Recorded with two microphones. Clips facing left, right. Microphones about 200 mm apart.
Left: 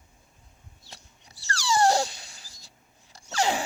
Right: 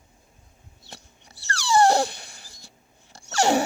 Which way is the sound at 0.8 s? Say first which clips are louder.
Right 5 dB; 60° right (ahead or behind).